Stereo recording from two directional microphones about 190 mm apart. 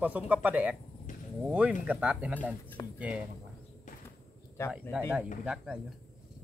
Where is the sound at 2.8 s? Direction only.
20° left (ahead or behind).